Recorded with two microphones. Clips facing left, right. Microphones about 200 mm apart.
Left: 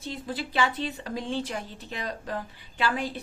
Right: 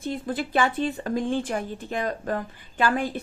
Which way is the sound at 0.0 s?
50° right (ahead or behind).